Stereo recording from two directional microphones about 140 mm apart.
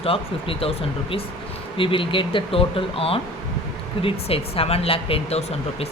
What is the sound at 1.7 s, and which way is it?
Speech, 40° left (ahead or behind).